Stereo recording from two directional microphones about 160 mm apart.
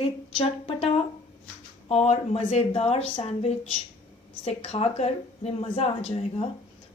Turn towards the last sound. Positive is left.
turn(degrees=40)  # may be behind; listen again after turning